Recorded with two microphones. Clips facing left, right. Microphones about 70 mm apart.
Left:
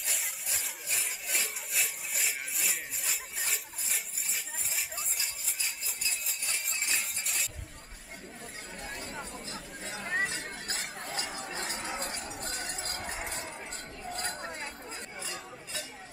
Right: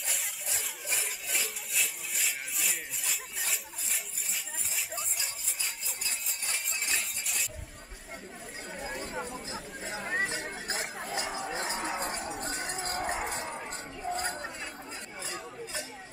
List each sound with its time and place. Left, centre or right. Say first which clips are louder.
0.0 s sawing: right 1 dB; centre
0.9 s rub: even; centre
4.7 s a sound: right 2 dB; centre
6.9 s cutlery: right 2 dB; centre
8.7 s chatter: right 5 dB; centre
11.3 s chink: right 4 dB; centre
12.3 s a sound: right 3 dB; right
13.5 s chink: right 4 dB; centre